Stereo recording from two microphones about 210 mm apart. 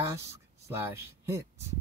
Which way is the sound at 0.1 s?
15° right (ahead or behind).